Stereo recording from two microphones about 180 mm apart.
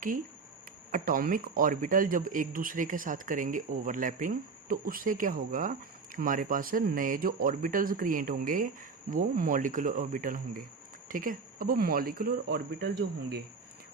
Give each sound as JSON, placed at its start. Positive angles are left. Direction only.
{"t": 0.9, "sound": "speech", "side_deg": -50}